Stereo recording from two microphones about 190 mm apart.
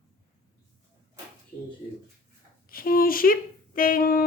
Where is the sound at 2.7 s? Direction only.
50° left (ahead or behind).